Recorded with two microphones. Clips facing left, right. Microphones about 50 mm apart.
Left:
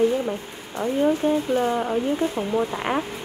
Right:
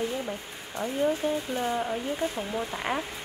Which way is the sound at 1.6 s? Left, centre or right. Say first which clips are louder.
Left 6 dB; left.